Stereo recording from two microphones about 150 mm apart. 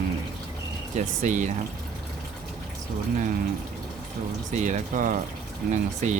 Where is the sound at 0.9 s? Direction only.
55° right (ahead or behind).